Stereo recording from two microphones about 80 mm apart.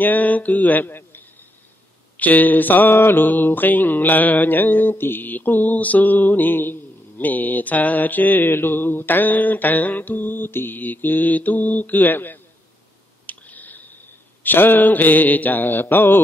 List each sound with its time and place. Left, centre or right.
0.0 s mantra: left
13.3 s a sound: left
14.4 s mantra: left